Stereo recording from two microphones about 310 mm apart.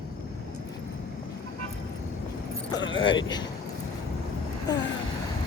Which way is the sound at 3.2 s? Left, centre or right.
Centre.